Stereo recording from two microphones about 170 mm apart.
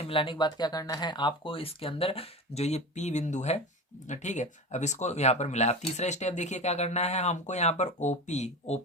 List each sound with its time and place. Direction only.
0.0 s speech: 30° left (ahead or behind)